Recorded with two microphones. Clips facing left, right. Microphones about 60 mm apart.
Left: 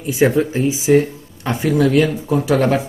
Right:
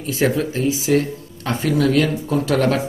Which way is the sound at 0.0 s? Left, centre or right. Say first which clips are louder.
Left 4 dB; centre.